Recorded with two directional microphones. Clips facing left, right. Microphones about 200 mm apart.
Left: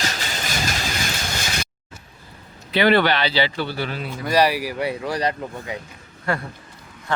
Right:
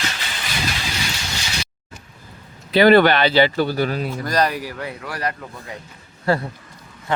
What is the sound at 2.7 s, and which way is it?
Speech, 45° right (ahead or behind).